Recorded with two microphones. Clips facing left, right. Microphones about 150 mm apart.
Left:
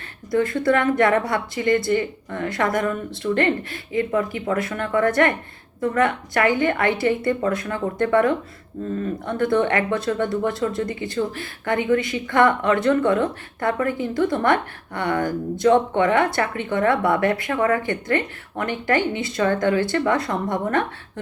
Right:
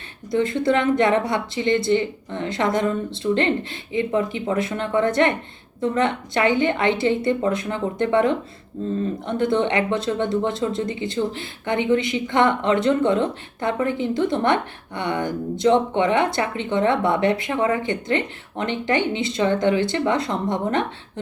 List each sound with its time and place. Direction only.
0.3 s speech: 20° right (ahead or behind)